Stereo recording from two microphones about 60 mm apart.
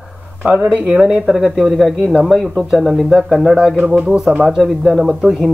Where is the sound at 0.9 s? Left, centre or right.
Centre.